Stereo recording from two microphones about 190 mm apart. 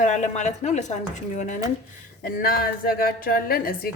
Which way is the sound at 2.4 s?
50° left (ahead or behind).